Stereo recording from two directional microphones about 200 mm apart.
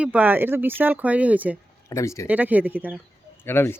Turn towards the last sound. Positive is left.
turn(degrees=10)  # may be behind; listen again after turning